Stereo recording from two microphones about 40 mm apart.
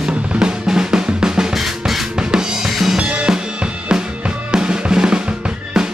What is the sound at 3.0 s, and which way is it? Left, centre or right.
Drum, right.